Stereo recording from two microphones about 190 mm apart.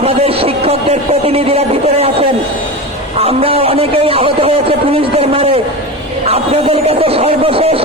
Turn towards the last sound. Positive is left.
turn(degrees=-30)  # may be behind; listen again after turning